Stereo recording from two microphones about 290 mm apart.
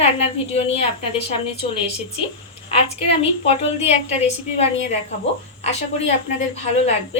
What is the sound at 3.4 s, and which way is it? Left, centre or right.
A woman's voice, left.